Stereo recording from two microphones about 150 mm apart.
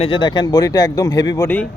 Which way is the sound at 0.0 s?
35° left (ahead or behind).